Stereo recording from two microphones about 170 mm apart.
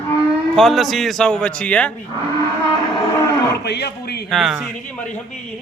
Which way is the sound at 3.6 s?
75° left (ahead or behind).